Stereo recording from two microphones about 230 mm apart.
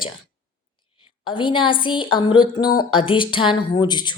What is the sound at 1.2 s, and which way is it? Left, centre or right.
Speech, left.